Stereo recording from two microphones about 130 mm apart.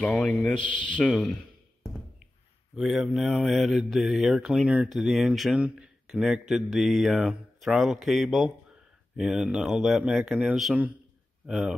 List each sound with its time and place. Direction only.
0.0 s a man's voice: 10° left (ahead or behind)
2.7 s mantra: centre (ahead or behind)